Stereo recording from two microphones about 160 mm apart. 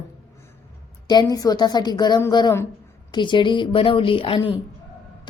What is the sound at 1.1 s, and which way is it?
A woman's voice, 25° left (ahead or behind).